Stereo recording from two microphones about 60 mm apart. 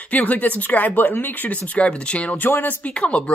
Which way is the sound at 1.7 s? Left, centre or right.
Left.